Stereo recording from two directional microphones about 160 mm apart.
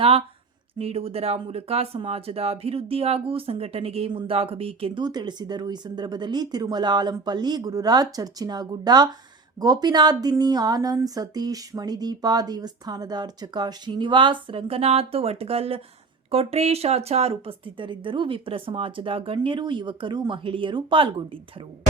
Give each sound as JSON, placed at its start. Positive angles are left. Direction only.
{"t": 0.8, "sound": "speech", "side_deg": -40}